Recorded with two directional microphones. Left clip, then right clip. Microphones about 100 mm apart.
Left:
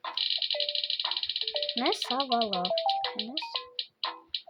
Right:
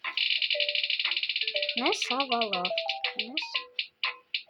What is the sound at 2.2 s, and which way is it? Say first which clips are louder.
Speech: even; 25° left (ahead or behind).